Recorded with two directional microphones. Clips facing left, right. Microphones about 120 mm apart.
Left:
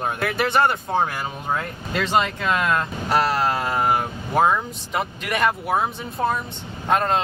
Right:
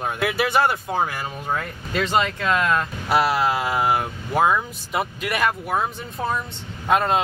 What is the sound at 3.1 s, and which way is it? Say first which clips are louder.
Speech: right 1 dB; 10° right (ahead or behind).